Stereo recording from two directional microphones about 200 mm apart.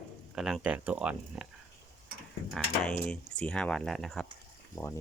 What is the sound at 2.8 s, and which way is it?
Speech, 5° left (ahead or behind).